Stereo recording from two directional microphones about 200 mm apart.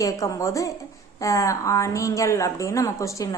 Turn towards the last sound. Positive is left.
turn(degrees=15)  # may be behind; listen again after turning